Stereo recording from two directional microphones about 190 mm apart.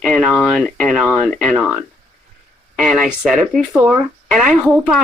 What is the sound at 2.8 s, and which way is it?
Speech, centre (ahead or behind).